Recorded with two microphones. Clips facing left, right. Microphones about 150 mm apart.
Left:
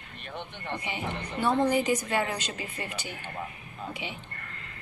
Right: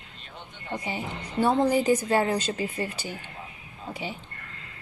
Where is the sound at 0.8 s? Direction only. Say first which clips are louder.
Right 1 dB; 35° right (ahead or behind).